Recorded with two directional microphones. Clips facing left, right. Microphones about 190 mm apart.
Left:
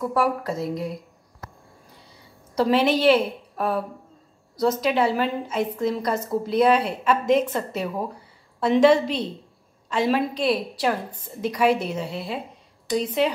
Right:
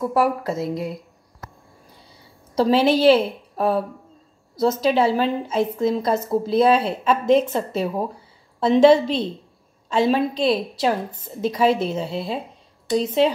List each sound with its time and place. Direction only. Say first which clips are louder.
0.2 s speech: right 3 dB; 5° right (ahead or behind)
2.5 s a woman's voice: right 3 dB; 30° right (ahead or behind)